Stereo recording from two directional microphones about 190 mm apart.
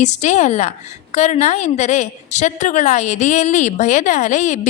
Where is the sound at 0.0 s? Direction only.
40° left (ahead or behind).